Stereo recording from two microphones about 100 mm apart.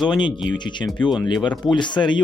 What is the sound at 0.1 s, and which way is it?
Speech, 50° left (ahead or behind).